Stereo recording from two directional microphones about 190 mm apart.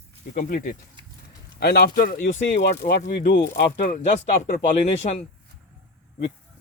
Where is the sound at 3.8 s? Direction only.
50° left (ahead or behind).